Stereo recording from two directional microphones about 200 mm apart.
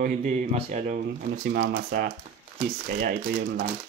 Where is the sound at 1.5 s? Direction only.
55° right (ahead or behind).